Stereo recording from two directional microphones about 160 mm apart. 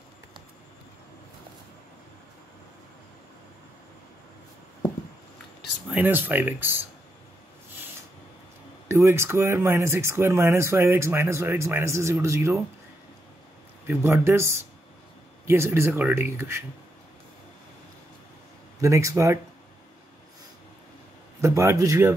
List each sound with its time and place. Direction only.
5.6 s speech: 10° right (ahead or behind)
8.8 s speech: 15° right (ahead or behind)
13.8 s speech: 15° right (ahead or behind)
18.8 s a man's voice: 20° right (ahead or behind)
21.4 s a man's voice: 20° right (ahead or behind)